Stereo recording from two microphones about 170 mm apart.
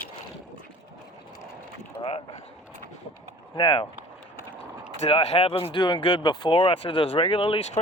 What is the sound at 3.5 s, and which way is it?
Speech, 30° left (ahead or behind).